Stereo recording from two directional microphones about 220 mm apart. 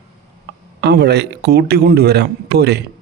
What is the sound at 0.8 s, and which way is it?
Speech, 50° right (ahead or behind).